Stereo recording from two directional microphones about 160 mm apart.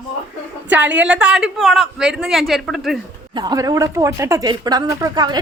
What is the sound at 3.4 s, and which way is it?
Speech, 25° right (ahead or behind).